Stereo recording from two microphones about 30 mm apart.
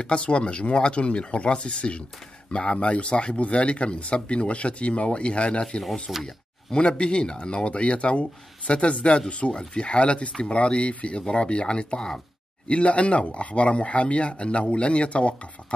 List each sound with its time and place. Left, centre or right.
0.0 s speech: left
5.6 s speech: left
6.1 s speech: centre
6.9 s speech: left